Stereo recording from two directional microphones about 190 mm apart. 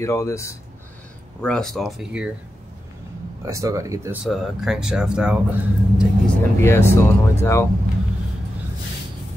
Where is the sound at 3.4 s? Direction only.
15° right (ahead or behind).